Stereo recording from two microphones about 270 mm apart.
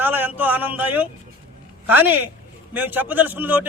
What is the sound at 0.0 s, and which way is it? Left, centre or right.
A man's voice, centre.